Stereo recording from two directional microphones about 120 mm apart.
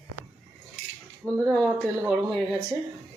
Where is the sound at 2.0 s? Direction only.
10° right (ahead or behind).